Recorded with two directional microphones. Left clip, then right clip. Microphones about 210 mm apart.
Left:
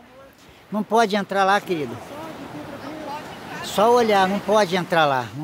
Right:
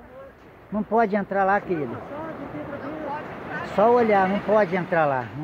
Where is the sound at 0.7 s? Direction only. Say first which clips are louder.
Left 3 dB; 30° left (ahead or behind).